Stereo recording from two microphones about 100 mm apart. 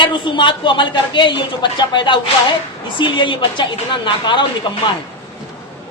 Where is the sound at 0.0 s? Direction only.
55° left (ahead or behind).